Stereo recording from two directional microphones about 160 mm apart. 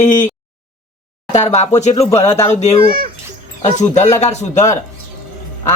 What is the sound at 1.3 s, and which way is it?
Speech, 45° left (ahead or behind).